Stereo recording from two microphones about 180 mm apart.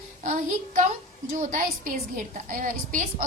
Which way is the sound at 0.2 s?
45° right (ahead or behind).